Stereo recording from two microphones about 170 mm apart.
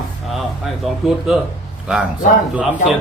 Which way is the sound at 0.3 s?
Centre (ahead or behind).